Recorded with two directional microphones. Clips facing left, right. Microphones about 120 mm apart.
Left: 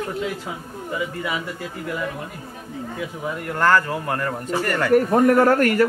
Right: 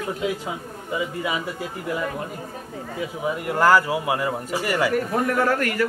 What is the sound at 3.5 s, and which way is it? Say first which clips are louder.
A man's voice: right 1 dB; 10° right (ahead or behind).